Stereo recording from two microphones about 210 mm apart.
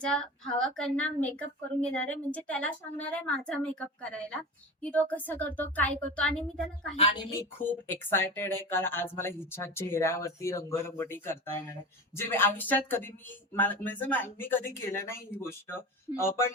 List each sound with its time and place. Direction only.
0.6 s a woman's voice: 5° left (ahead or behind)
6.9 s a woman's voice: 25° left (ahead or behind)
7.3 s speech: 10° left (ahead or behind)